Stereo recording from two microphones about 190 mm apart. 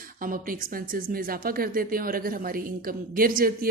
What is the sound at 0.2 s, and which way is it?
A woman's voice, 45° right (ahead or behind).